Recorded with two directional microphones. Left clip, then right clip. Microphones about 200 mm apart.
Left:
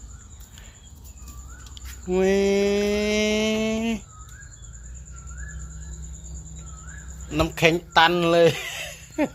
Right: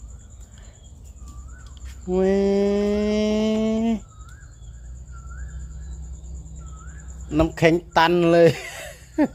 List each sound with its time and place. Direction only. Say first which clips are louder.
1.7 s mantra: right 1 dB; 20° right (ahead or behind)
7.3 s speech: right 2 dB; 25° right (ahead or behind)